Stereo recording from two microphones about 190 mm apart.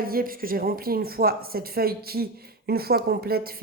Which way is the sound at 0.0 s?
50° right (ahead or behind).